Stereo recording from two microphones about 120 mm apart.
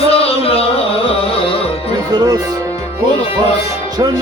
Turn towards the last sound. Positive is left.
turn(degrees=-35)  # may be behind; listen again after turning